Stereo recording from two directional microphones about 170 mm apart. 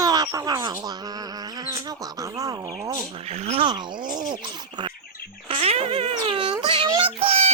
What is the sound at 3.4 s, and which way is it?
Speech, 35° right (ahead or behind).